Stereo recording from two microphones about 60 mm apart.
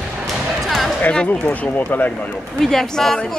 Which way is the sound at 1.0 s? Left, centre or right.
Left.